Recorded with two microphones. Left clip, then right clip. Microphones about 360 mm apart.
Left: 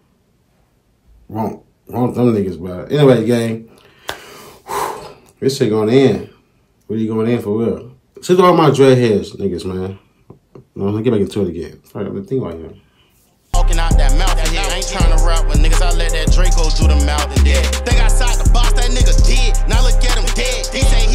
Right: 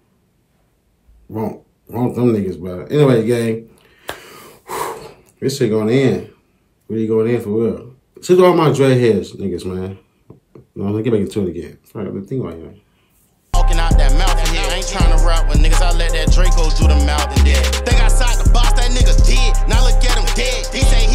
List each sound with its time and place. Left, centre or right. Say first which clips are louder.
1.3 s a sound: left 2 dB; centre
6.9 s speech: right 2 dB; centre
13.5 s music: even; centre